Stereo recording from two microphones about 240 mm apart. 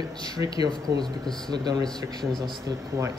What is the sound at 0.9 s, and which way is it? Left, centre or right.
Speech, centre.